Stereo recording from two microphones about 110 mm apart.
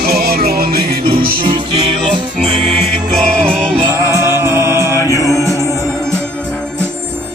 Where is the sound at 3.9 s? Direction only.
25° right (ahead or behind).